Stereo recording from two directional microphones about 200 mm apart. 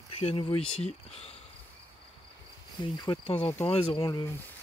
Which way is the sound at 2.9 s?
20° left (ahead or behind).